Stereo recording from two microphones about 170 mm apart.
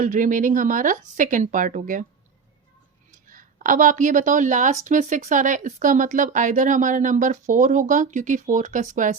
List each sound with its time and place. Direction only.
0.0 s speech: 50° right (ahead or behind)
3.1 s speech: 50° right (ahead or behind)